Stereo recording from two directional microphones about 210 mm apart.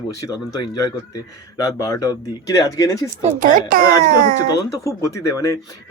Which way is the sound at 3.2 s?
40° right (ahead or behind).